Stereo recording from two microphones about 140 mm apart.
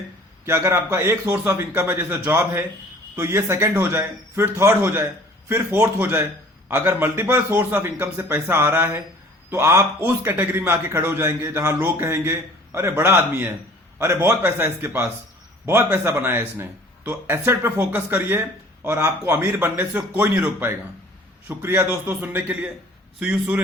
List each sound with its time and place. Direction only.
0.4 s speech: 20° right (ahead or behind)